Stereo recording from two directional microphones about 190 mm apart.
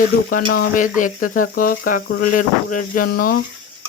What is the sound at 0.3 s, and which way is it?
Speech, 50° left (ahead or behind).